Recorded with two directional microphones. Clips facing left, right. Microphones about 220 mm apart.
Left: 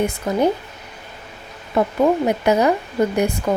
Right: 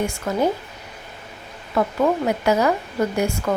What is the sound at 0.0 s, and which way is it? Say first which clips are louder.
Speech: left 3 dB; 20° left (ahead or behind).